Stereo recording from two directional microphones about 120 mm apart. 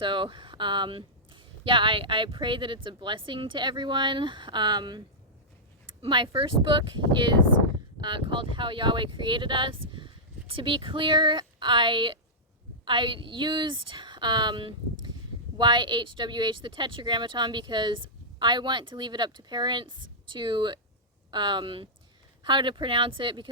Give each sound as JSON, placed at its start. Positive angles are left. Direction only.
{"t": 0.0, "sound": "speech", "side_deg": -40}